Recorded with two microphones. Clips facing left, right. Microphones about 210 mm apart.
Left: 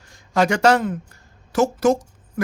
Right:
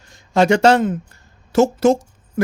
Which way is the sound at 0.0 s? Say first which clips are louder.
Right 4 dB; 25° right (ahead or behind).